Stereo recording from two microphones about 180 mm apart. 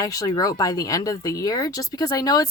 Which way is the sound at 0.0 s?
20° left (ahead or behind).